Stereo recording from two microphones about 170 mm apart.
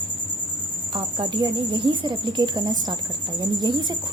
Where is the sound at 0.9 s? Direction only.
30° right (ahead or behind).